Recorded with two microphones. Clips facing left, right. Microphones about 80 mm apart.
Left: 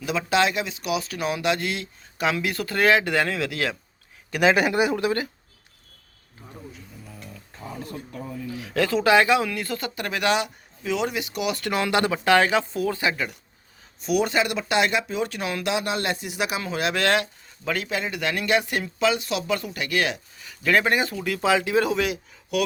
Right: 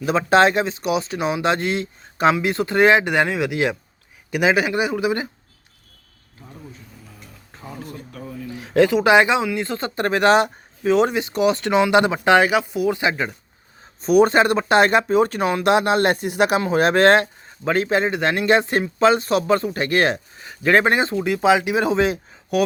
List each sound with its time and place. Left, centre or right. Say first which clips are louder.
0.0 s speech: right 7 dB; right; by 4.5 s centre
4.5 s speech: right 1 dB; centre
8.5 s speech: right 7 dB; right
14.0 s speech: right 8 dB; right